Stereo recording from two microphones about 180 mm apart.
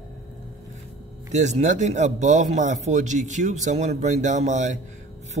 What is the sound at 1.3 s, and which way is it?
Speech, 40° right (ahead or behind).